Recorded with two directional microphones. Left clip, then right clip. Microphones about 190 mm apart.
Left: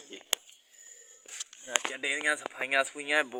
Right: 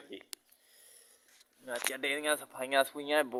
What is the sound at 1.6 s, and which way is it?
Speech, 10° right (ahead or behind).